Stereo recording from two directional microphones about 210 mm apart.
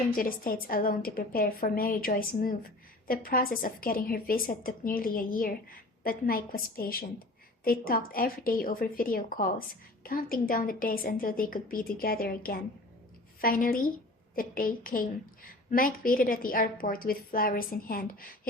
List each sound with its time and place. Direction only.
0.2 s a woman's voice: 45° left (ahead or behind)